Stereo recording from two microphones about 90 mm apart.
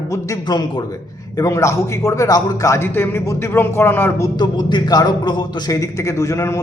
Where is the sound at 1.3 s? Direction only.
35° left (ahead or behind).